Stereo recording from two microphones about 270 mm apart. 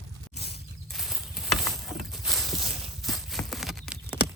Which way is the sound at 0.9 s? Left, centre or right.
Centre.